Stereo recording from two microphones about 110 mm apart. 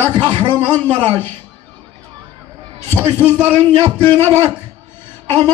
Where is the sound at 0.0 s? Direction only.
35° right (ahead or behind).